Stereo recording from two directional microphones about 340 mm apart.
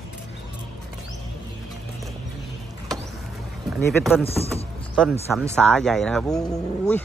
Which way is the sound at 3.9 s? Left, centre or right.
Centre.